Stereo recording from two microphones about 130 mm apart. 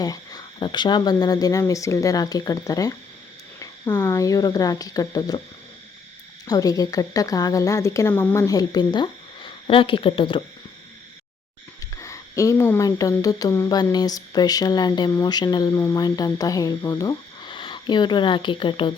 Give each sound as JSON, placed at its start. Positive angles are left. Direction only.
{"t": 0.0, "sound": "a woman's voice", "side_deg": 30}
{"t": 3.8, "sound": "a woman's voice", "side_deg": 15}
{"t": 6.5, "sound": "a woman's voice", "side_deg": 30}
{"t": 11.9, "sound": "a sound", "side_deg": 25}
{"t": 13.0, "sound": "speech", "side_deg": 25}
{"t": 15.8, "sound": "a woman's voice", "side_deg": 20}